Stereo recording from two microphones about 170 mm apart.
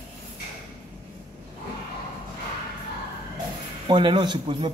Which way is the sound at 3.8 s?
25° right (ahead or behind).